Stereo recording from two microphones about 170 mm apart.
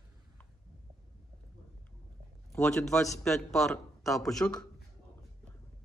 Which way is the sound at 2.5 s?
5° left (ahead or behind).